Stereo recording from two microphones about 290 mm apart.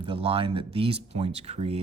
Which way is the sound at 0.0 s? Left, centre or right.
Centre.